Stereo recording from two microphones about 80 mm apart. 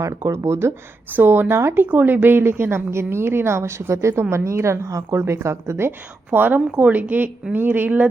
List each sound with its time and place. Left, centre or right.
0.3 s a woman's voice: right
6.3 s speech: right